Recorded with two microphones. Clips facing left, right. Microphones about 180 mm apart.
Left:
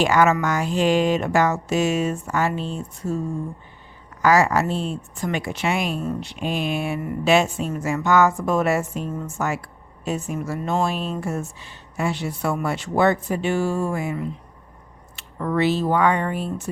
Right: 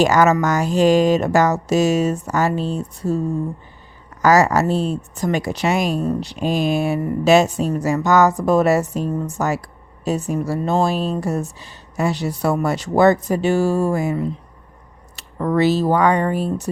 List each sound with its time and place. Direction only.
0.0 s speech: 40° right (ahead or behind)
4.2 s speech: 40° right (ahead or behind)